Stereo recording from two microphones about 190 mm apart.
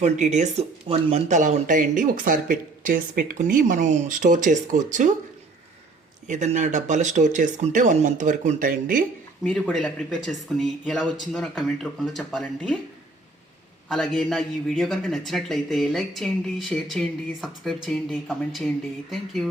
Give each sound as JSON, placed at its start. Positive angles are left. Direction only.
{"t": 0.0, "sound": "speech", "side_deg": -40}
{"t": 6.2, "sound": "speech", "side_deg": -40}
{"t": 9.4, "sound": "a man's voice", "side_deg": 10}
{"t": 13.8, "sound": "a man's voice", "side_deg": 5}